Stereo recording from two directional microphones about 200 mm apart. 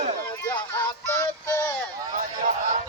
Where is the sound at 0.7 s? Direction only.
10° left (ahead or behind).